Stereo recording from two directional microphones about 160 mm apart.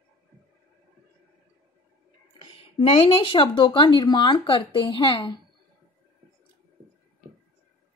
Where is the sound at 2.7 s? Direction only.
35° left (ahead or behind).